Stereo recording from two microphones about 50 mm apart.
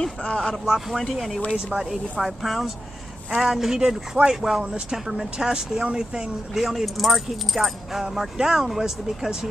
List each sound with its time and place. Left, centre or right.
0.0 s speech: left
0.7 s speech: centre
1.7 s speech: centre
2.1 s speech: centre